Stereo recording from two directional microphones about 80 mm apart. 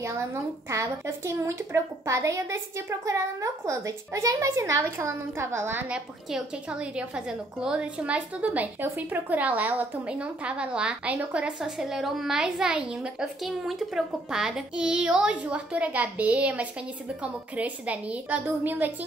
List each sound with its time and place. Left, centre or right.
0.0 s speech: right
5.9 s a woman's voice: centre